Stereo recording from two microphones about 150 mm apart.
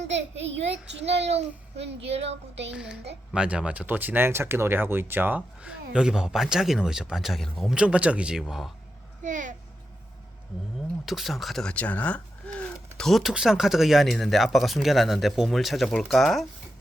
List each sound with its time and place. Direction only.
0.0 s a child's voice: 45° right (ahead or behind)
2.7 s speech: 5° right (ahead or behind)
9.2 s speech: 60° right (ahead or behind)
11.0 s speech: centre (ahead or behind)